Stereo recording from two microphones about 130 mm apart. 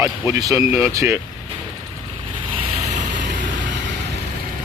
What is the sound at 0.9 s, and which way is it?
Speech, 25° right (ahead or behind).